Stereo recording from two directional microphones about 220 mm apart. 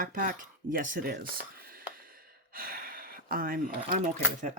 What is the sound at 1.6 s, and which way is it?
Gasp, 40° right (ahead or behind).